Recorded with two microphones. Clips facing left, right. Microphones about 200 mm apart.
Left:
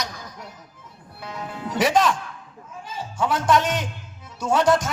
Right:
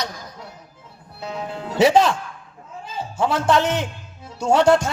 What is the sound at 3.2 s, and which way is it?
Speech, 30° right (ahead or behind).